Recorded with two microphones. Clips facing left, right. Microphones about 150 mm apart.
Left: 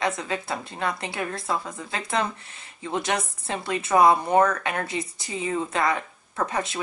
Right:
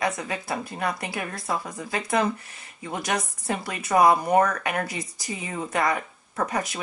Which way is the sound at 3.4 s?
25° left (ahead or behind).